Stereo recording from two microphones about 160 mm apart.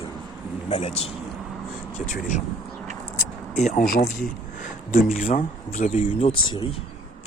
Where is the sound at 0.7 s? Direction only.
40° left (ahead or behind).